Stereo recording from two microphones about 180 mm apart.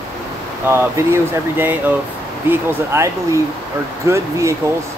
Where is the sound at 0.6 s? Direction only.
15° right (ahead or behind).